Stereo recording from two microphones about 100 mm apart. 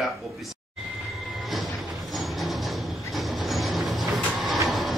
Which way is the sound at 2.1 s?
Centre (ahead or behind).